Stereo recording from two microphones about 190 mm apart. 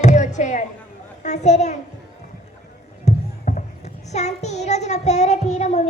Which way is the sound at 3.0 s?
40° left (ahead or behind).